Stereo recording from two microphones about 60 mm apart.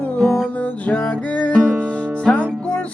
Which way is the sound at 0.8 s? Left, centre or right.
Centre.